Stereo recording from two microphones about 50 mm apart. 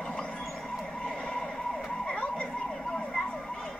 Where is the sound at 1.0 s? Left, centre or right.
Left.